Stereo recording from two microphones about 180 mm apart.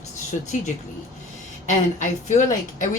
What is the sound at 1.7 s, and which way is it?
Speech, 45° left (ahead or behind).